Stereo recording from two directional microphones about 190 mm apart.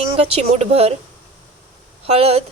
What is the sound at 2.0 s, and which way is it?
Speech, 30° right (ahead or behind).